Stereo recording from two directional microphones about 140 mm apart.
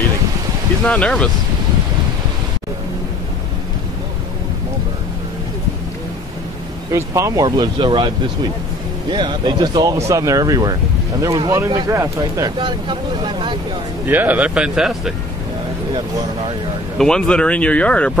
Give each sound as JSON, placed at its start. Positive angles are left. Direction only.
{"t": 0.8, "sound": "speech", "side_deg": 10}
{"t": 6.9, "sound": "speech", "side_deg": -20}
{"t": 9.1, "sound": "speech", "side_deg": -35}
{"t": 14.0, "sound": "speech", "side_deg": -15}
{"t": 17.0, "sound": "speech", "side_deg": 5}